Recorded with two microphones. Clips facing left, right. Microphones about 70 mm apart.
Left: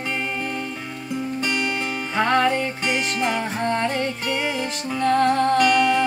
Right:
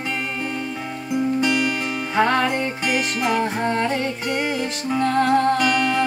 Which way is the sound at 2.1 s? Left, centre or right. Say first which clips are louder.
Even; centre.